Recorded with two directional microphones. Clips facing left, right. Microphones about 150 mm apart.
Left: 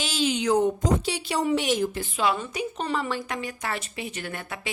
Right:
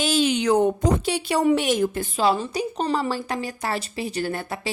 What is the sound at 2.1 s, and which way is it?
A woman's voice, 35° right (ahead or behind).